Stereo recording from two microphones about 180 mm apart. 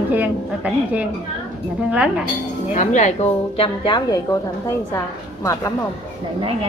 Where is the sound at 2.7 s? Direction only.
40° left (ahead or behind); by 4.1 s 25° left (ahead or behind).